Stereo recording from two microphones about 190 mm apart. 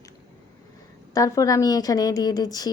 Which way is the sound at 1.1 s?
20° left (ahead or behind).